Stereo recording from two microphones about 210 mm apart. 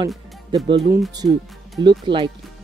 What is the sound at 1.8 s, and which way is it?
Speech, 25° right (ahead or behind).